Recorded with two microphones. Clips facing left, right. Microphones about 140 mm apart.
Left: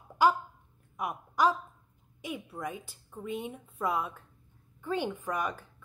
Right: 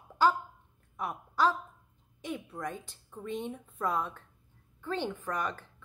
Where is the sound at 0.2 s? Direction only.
15° left (ahead or behind).